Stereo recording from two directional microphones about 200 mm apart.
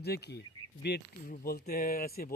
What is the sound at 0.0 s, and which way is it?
Speech, 55° left (ahead or behind).